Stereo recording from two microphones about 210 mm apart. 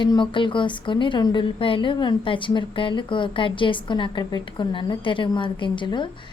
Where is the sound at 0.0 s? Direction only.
20° left (ahead or behind).